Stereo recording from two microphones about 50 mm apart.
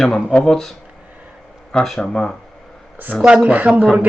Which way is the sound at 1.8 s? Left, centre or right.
Centre.